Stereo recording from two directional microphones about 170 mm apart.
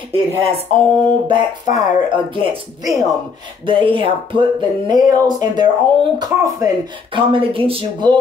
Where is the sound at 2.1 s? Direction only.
30° right (ahead or behind).